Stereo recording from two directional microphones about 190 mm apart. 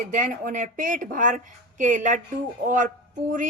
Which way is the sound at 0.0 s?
45° right (ahead or behind).